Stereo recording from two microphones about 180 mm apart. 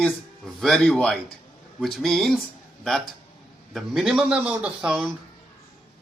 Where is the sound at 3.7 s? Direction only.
Centre (ahead or behind).